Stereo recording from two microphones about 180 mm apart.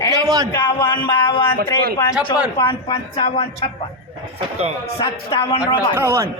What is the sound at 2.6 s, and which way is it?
Speech, 30° left (ahead or behind).